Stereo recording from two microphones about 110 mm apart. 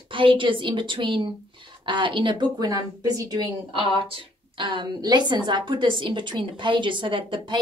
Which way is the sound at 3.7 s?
55° right (ahead or behind).